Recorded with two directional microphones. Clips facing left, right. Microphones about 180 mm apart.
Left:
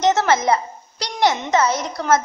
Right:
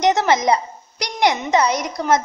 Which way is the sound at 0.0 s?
15° right (ahead or behind).